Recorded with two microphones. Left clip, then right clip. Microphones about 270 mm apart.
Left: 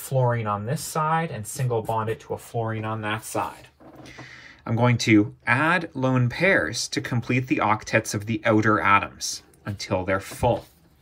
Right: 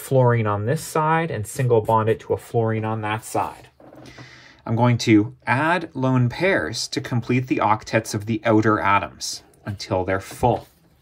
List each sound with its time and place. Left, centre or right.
0.1 s speech: right